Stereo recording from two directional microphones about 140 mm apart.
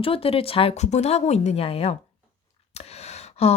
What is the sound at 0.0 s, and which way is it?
Speech, 40° left (ahead or behind).